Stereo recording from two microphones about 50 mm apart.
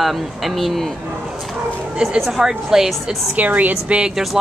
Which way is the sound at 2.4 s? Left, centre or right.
Centre.